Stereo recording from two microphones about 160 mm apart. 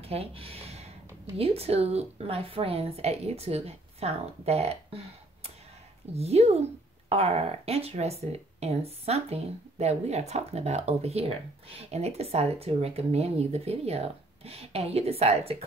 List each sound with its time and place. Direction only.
0.0 s speech: 40° right (ahead or behind)